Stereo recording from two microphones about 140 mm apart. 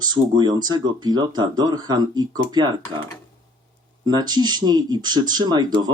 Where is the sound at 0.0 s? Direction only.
30° right (ahead or behind).